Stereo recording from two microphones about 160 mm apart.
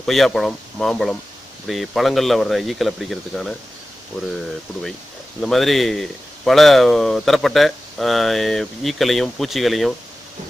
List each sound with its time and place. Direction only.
0.0 s speech: centre (ahead or behind)
5.4 s speech: centre (ahead or behind)